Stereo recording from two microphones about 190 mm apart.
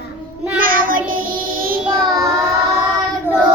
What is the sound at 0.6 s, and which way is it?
Child singing, 45° right (ahead or behind).